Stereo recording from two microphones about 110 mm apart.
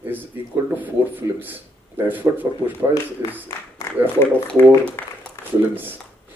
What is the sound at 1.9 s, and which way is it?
Speech, 15° right (ahead or behind).